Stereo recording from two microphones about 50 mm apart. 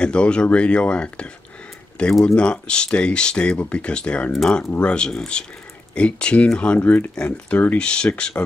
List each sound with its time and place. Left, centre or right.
0.0 s speech: centre
4.3 s speech: centre
4.7 s speech: centre